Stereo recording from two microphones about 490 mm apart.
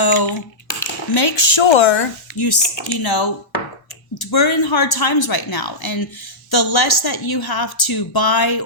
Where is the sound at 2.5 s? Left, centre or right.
Left.